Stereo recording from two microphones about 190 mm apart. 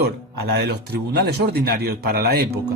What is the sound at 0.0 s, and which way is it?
Speech, 60° right (ahead or behind).